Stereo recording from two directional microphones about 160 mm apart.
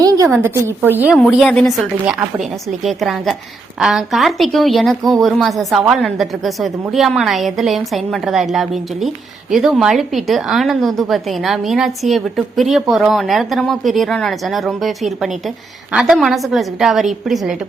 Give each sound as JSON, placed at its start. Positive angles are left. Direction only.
{"t": 0.0, "sound": "a sound", "side_deg": -20}
{"t": 0.4, "sound": "speech", "side_deg": -15}
{"t": 1.1, "sound": "a woman's voice", "side_deg": 0}